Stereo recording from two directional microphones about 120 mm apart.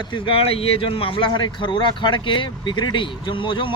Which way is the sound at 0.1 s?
50° left (ahead or behind).